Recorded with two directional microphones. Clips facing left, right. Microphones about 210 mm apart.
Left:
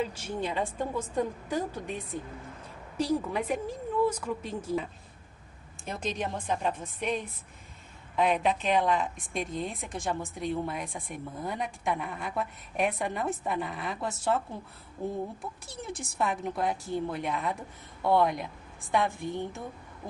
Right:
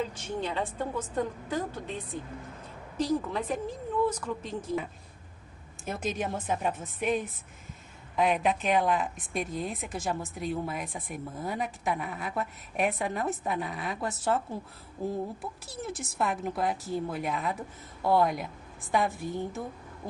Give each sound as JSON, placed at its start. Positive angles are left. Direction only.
{"t": 0.0, "sound": "a woman's voice", "side_deg": 10}
{"t": 3.0, "sound": "a woman's voice", "side_deg": 10}
{"t": 5.9, "sound": "speech", "side_deg": -5}
{"t": 15.6, "sound": "speech", "side_deg": -5}